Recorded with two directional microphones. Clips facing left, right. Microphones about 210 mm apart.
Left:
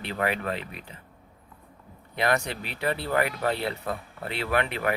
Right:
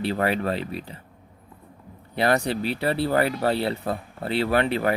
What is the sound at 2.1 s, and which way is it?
Speech, 35° right (ahead or behind).